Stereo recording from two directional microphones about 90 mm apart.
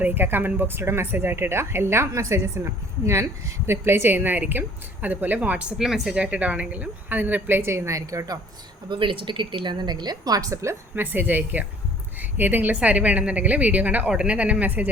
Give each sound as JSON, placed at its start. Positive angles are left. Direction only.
{"t": 0.0, "sound": "a woman's voice", "side_deg": -25}
{"t": 8.9, "sound": "a woman's voice", "side_deg": -70}